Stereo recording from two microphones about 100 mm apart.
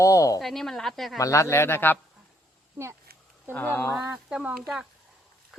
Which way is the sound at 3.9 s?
30° right (ahead or behind).